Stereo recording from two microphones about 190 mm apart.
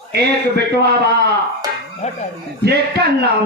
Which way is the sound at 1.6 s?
20° right (ahead or behind).